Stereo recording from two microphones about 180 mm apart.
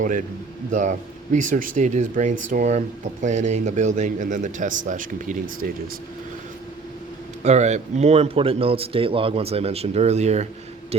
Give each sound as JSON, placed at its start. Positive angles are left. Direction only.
{"t": 0.0, "sound": "speech", "side_deg": -45}
{"t": 7.4, "sound": "speech", "side_deg": -40}